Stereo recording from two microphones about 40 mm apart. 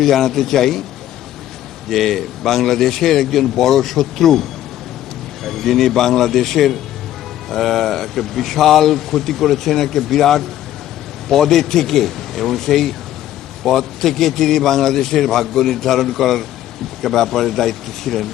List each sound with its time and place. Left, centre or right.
0.0 s a man's voice: centre
1.9 s speech: centre